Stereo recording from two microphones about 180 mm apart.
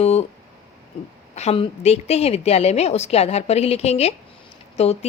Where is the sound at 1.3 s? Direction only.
35° left (ahead or behind).